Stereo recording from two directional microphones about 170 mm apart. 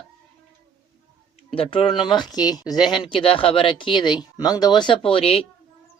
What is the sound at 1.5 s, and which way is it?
Speech, 35° left (ahead or behind).